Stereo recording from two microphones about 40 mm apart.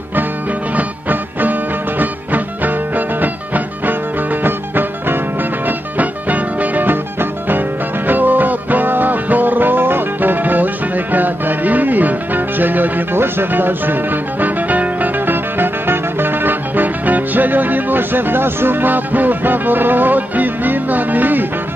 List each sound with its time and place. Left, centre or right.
0.7 s music: right
5.7 s music: right
13.1 s music: right